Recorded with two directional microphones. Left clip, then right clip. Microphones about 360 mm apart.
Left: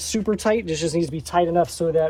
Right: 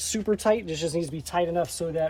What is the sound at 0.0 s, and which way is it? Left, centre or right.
Speech, centre.